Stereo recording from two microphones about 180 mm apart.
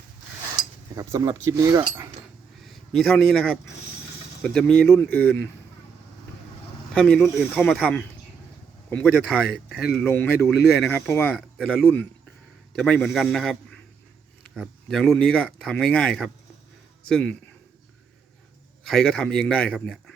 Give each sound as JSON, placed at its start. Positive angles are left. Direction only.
{"t": 0.9, "sound": "speech", "side_deg": -20}
{"t": 2.6, "sound": "a man's voice", "side_deg": 0}
{"t": 6.9, "sound": "a man's voice", "side_deg": 5}
{"t": 10.6, "sound": "speech", "side_deg": 65}
{"t": 10.8, "sound": "a man's voice", "side_deg": 10}
{"t": 18.9, "sound": "a man's voice", "side_deg": 5}